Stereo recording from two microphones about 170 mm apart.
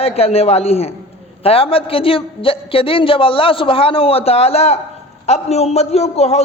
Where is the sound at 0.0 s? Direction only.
35° left (ahead or behind).